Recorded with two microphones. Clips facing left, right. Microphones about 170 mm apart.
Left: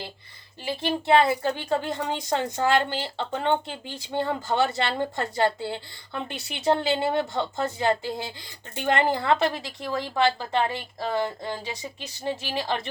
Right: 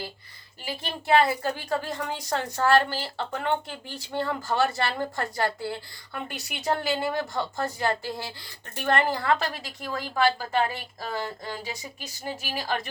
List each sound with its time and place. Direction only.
0.6 s a woman's voice: 25° left (ahead or behind)